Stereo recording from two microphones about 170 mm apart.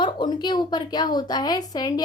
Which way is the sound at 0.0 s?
25° left (ahead or behind).